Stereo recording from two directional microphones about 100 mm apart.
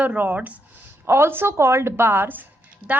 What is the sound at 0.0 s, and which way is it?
A woman's voice, 15° right (ahead or behind).